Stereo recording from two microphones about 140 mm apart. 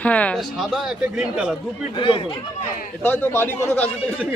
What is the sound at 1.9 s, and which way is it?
Speech, 35° left (ahead or behind).